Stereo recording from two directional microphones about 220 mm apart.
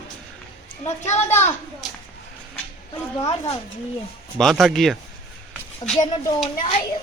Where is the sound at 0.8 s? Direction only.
30° left (ahead or behind).